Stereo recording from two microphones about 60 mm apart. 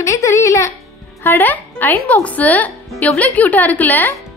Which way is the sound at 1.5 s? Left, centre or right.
Left.